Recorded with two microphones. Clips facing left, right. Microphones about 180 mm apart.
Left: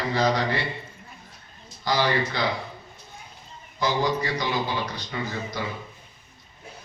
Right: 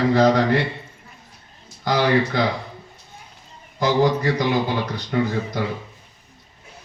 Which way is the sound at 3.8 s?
50° right (ahead or behind).